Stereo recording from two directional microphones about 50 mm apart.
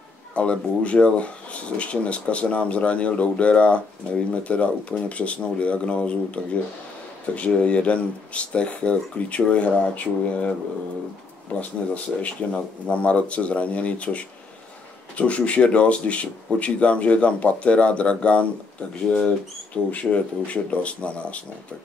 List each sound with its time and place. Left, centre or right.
0.3 s speech: left
11.5 s speech: left